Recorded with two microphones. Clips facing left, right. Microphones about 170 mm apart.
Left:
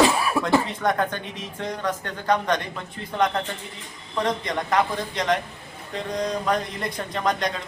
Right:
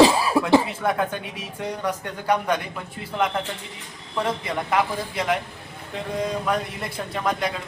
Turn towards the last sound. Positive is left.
turn(degrees=-5)  # may be behind; listen again after turning